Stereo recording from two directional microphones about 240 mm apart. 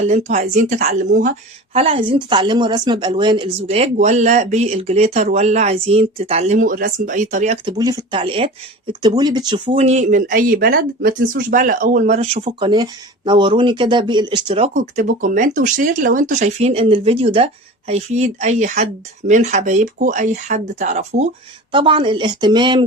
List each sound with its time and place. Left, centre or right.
0.3 s speech: right
7.7 s speech: centre